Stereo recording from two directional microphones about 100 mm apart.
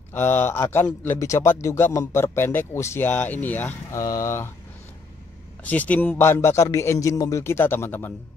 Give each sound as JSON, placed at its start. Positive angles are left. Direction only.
{"t": 0.1, "sound": "speech", "side_deg": 20}
{"t": 3.1, "sound": "speech", "side_deg": 15}
{"t": 3.9, "sound": "speech", "side_deg": 30}
{"t": 5.7, "sound": "speech", "side_deg": 15}
{"t": 6.1, "sound": "speech", "side_deg": 25}